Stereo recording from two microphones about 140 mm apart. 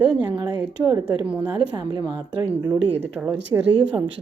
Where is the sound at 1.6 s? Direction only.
30° right (ahead or behind).